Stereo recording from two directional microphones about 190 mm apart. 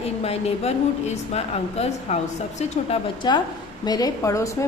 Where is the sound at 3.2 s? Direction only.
20° left (ahead or behind).